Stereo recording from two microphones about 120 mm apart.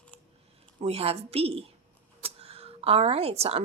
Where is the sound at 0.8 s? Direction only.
55° right (ahead or behind).